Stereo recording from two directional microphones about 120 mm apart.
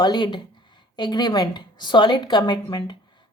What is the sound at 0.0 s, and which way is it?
A woman's voice, 40° left (ahead or behind).